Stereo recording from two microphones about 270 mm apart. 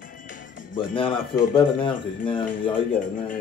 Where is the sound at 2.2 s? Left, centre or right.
Centre.